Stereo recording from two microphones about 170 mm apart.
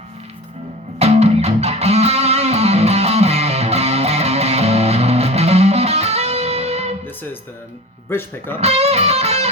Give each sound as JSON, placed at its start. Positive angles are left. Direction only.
{"t": 0.9, "sound": "music", "side_deg": -40}
{"t": 8.1, "sound": "speech", "side_deg": 15}
{"t": 8.6, "sound": "music", "side_deg": -40}